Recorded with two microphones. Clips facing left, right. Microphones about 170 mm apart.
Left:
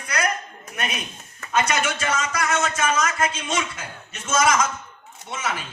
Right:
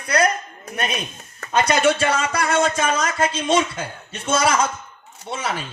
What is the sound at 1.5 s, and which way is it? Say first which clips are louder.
Speech: right 5 dB; 30° right (ahead or behind).